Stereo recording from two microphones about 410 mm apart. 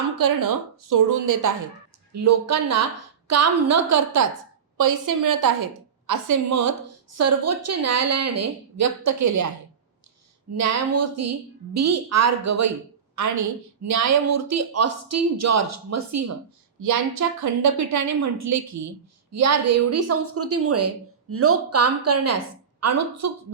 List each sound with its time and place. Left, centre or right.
0.2 s a woman's voice: right
10.6 s a woman's voice: right